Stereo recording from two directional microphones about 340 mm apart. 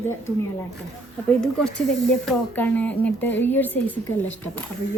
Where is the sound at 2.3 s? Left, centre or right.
Centre.